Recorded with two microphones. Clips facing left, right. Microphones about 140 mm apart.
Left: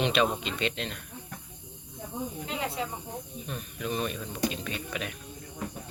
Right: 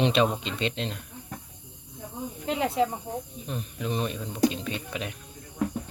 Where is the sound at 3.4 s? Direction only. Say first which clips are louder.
Right 1 dB; 25° right (ahead or behind).